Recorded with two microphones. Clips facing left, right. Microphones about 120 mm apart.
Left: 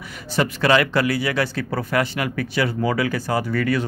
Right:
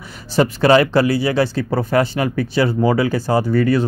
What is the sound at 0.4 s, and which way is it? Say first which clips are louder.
Speech: right 5 dB; 30° right (ahead or behind).